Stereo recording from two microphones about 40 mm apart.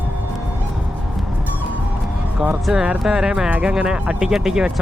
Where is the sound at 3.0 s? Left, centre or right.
Centre.